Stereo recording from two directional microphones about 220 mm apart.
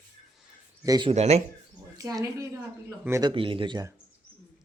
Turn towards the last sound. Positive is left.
turn(degrees=-20)  # may be behind; listen again after turning